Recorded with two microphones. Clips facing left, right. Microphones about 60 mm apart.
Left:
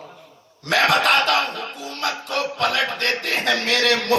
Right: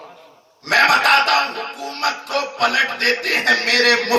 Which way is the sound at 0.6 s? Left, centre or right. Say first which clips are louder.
Right 3 dB; right.